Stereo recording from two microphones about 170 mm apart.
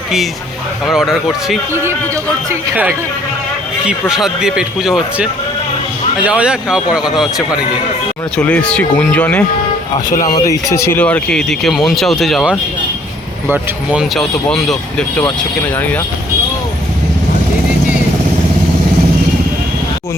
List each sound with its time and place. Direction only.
0.9 s speech: centre (ahead or behind)
1.7 s speech: 15° right (ahead or behind)
4.1 s speech: 5° right (ahead or behind)
10.2 s speech: 20° left (ahead or behind); by 15.0 s 5° left (ahead or behind)